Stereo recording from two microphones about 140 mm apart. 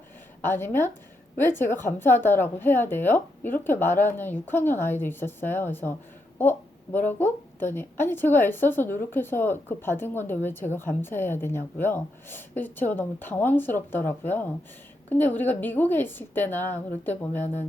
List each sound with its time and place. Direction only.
0.4 s a woman's voice: 15° left (ahead or behind)